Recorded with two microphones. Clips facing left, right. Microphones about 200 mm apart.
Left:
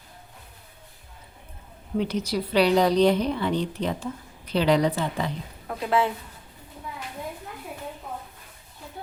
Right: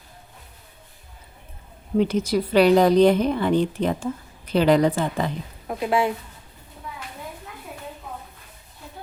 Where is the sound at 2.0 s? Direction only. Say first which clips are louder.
Right 5 dB; 50° right (ahead or behind).